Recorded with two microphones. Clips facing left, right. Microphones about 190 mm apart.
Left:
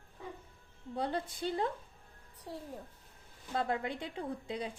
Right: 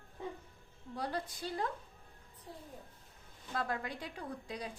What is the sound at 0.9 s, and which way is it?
Speech, 25° left (ahead or behind).